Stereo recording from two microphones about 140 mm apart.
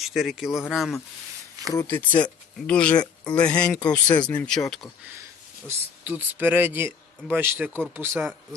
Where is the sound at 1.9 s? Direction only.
15° left (ahead or behind).